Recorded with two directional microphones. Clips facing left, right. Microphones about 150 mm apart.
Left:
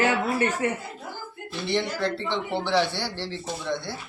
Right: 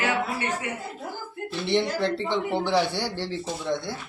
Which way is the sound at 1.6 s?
25° right (ahead or behind).